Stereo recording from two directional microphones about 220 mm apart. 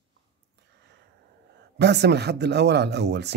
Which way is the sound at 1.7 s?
50° right (ahead or behind).